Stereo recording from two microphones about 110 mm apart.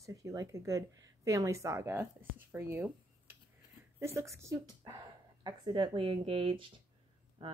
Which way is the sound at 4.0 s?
25° right (ahead or behind).